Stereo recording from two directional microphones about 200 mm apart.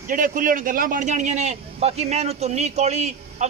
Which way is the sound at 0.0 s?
40° right (ahead or behind).